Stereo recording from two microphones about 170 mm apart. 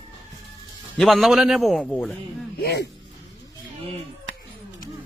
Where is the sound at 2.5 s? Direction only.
70° left (ahead or behind).